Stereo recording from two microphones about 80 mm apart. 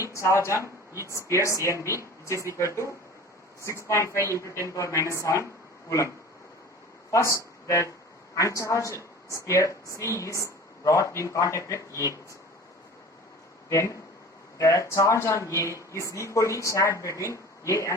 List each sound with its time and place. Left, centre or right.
0.0 s speech: left
7.1 s speech: left
13.7 s speech: left